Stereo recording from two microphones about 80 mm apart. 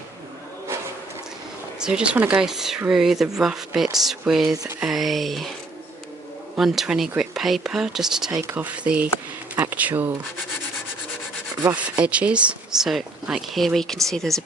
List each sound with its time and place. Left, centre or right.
1.8 s speech: centre
4.4 s a sound: right
4.8 s speech: centre
6.6 s speech: centre
8.5 s speech: centre
11.7 s speech: centre
13.6 s speech: centre